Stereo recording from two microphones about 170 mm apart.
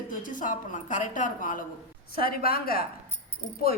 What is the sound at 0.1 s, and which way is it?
A woman's voice, 50° left (ahead or behind).